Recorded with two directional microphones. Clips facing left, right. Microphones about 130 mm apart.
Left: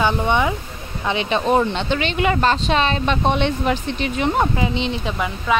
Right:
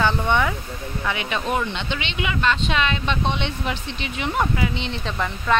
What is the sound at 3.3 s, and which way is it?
Speech, 45° left (ahead or behind).